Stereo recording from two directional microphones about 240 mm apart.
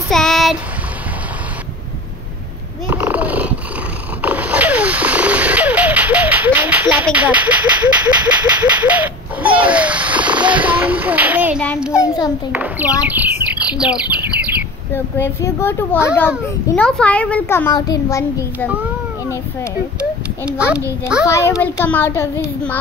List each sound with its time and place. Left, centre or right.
0.1 s child singing: centre
2.9 s purr: centre
4.2 s a sound: centre
12.0 s a child's voice: centre
12.5 s speech: centre
15.1 s a child's voice: centre
20.0 s a sound: centre
21.3 s a child's voice: centre